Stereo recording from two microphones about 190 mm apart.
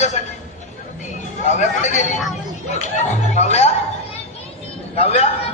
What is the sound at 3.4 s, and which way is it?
Speech, 35° left (ahead or behind).